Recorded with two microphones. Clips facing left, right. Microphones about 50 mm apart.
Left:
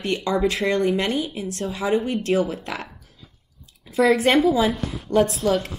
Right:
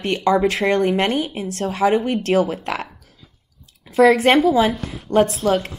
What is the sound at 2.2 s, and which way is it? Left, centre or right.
Speech, right.